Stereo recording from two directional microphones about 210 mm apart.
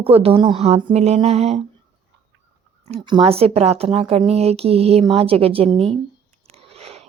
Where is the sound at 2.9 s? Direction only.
20° right (ahead or behind).